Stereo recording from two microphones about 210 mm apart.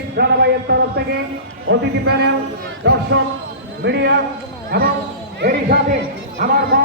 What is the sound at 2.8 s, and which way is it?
A man's voice, 60° right (ahead or behind).